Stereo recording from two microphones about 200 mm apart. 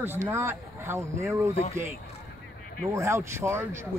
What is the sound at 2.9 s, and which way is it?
Speech, 15° right (ahead or behind).